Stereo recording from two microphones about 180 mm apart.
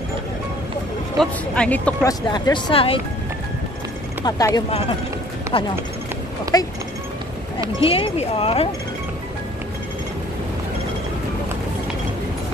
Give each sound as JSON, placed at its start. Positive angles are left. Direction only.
{"t": 1.1, "sound": "speech", "side_deg": 5}
{"t": 2.0, "sound": "speech", "side_deg": 20}
{"t": 4.2, "sound": "speech", "side_deg": 20}
{"t": 4.6, "sound": "speech", "side_deg": 35}
{"t": 7.8, "sound": "speech", "side_deg": 30}